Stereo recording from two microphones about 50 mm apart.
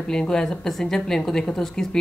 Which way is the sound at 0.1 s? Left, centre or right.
Centre.